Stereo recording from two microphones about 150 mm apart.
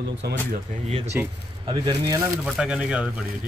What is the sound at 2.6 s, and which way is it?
Speech, 5° right (ahead or behind).